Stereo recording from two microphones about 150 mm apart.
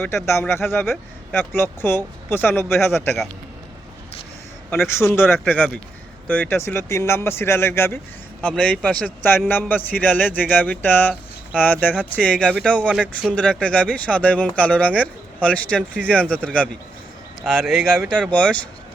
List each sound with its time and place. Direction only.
0.3 s speech: 15° left (ahead or behind)
4.9 s speech: 15° left (ahead or behind)
12.9 s speech: 5° right (ahead or behind)
13.3 s speech: 5° left (ahead or behind)
17.5 s speech: 5° left (ahead or behind)